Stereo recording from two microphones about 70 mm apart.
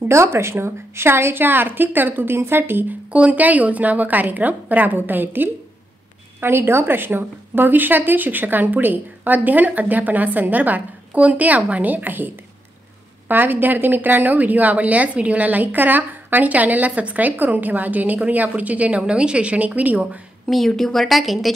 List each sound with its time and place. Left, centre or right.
0.0 s a woman's voice: right
13.3 s a woman's voice: right
20.4 s a woman's voice: centre